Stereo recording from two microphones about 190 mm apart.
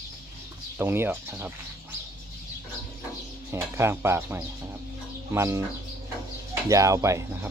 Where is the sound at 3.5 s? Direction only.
15° right (ahead or behind).